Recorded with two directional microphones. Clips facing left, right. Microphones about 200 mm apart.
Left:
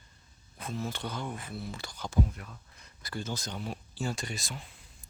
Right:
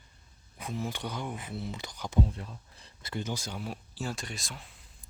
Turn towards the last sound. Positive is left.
turn(degrees=0)  # may be behind; listen again after turning